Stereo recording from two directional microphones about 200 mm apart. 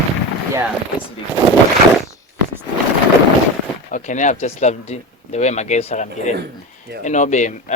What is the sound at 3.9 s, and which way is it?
Speech, 40° left (ahead or behind).